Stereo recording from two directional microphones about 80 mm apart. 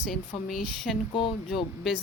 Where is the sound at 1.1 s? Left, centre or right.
Left.